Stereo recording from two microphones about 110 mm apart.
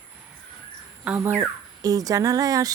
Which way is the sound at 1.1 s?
25° right (ahead or behind).